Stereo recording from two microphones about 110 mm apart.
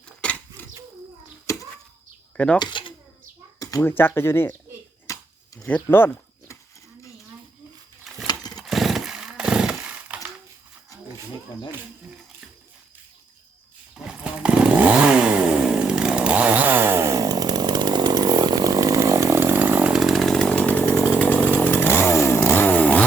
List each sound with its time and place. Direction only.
0.2 s a sound: 10° left (ahead or behind)
1.5 s a sound: 25° left (ahead or behind)
2.3 s speech: 10° left (ahead or behind)
2.6 s speech: 45° left (ahead or behind)
3.6 s speech: 30° left (ahead or behind)
5.1 s a sound: 30° left (ahead or behind)
5.6 s speech: 15° left (ahead or behind)
8.3 s motorcycle: 40° left (ahead or behind)
8.6 s chainsaw: centre (ahead or behind)
13.9 s chainsaw: 10° right (ahead or behind)
19.9 s chainsaw: centre (ahead or behind)